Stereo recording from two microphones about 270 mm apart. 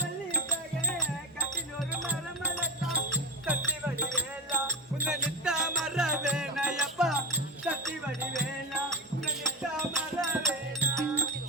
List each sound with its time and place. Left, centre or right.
2.0 s music: centre
9.9 s music: centre